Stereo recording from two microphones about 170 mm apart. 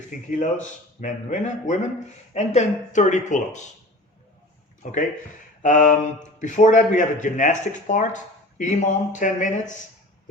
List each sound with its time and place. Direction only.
0.3 s speech: 50° left (ahead or behind)
4.8 s speech: 45° left (ahead or behind)